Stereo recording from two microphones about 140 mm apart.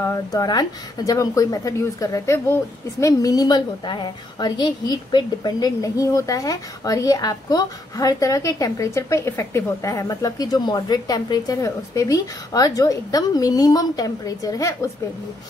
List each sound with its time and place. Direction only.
0.0 s a woman's voice: 25° left (ahead or behind)